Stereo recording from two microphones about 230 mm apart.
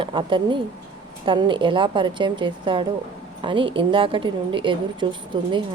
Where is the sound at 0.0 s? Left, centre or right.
Right.